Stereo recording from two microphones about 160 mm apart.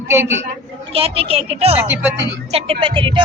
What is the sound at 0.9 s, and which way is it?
Speech, 35° right (ahead or behind).